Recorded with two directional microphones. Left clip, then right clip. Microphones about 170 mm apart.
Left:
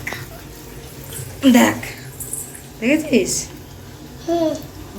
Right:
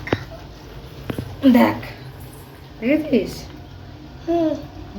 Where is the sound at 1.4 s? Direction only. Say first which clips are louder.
Left 1 dB; 5° left (ahead or behind).